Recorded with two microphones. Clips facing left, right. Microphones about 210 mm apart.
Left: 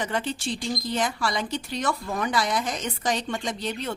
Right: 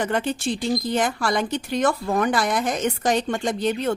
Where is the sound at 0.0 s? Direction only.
55° right (ahead or behind).